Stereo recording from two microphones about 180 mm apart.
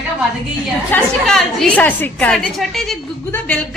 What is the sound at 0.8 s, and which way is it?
A woman's voice, 5° left (ahead or behind).